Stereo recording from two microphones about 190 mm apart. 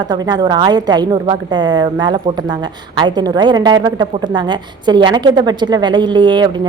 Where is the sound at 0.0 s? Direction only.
20° right (ahead or behind).